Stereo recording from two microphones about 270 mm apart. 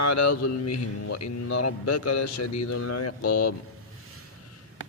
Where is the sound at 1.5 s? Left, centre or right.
Left.